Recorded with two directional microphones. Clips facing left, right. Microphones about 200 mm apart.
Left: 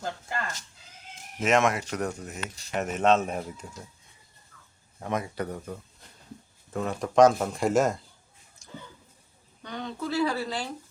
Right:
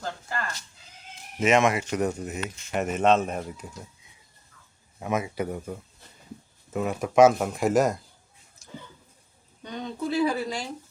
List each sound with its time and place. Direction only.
0.0 s speech: 20° left (ahead or behind)
1.4 s speech: centre (ahead or behind)
2.0 s speech: 15° right (ahead or behind)
2.7 s speech: 5° right (ahead or behind)
4.9 s speech: 10° right (ahead or behind)
6.7 s speech: 10° right (ahead or behind)
9.6 s speech: 20° right (ahead or behind)